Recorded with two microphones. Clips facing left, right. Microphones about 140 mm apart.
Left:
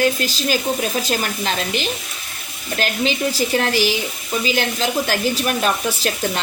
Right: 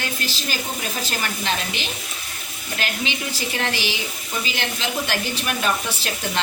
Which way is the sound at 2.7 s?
40° left (ahead or behind).